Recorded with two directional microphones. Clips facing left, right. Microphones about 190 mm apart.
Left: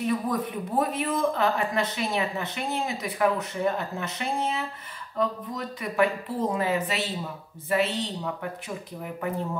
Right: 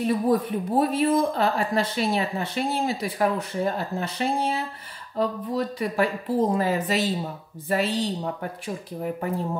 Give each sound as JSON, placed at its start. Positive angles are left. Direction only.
{"t": 0.0, "sound": "speech", "side_deg": -30}